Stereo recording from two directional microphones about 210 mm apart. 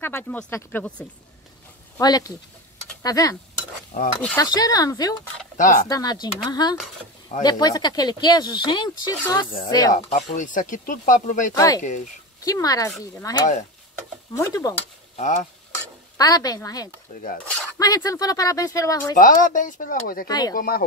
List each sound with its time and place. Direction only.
0.0 s speech: 10° left (ahead or behind)
2.0 s speech: 15° left (ahead or behind)
4.4 s speech: 20° left (ahead or behind)
5.6 s speech: 40° left (ahead or behind)
5.9 s speech: 20° left (ahead or behind)
9.9 s speech: 35° left (ahead or behind)
11.5 s speech: 15° left (ahead or behind)
11.8 s speech: 35° left (ahead or behind)
12.4 s speech: 15° left (ahead or behind)
15.1 s stir: 35° left (ahead or behind)
16.2 s speech: 15° left (ahead or behind)
19.1 s speech: 40° left (ahead or behind)
20.2 s speech: 20° left (ahead or behind)
20.5 s speech: 45° left (ahead or behind)